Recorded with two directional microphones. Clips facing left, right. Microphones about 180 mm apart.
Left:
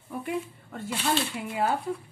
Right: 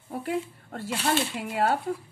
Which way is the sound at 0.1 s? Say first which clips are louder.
Right 2 dB; 80° right.